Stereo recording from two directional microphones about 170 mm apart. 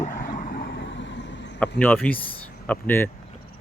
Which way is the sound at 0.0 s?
55° left (ahead or behind).